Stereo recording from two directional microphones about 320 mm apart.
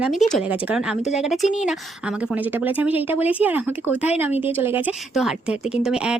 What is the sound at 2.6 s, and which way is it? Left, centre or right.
Speech, centre.